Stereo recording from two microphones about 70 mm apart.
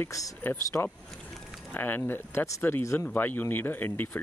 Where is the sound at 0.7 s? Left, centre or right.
Left.